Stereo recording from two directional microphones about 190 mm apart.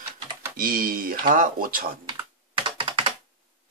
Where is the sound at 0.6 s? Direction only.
50° right (ahead or behind).